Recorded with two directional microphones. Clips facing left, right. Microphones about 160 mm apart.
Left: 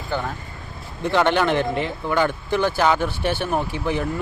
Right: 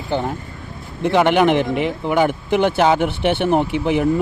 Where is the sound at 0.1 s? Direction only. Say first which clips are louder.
Right 5 dB; 20° right (ahead or behind).